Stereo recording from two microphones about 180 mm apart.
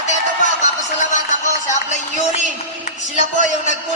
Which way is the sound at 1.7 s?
45° left (ahead or behind).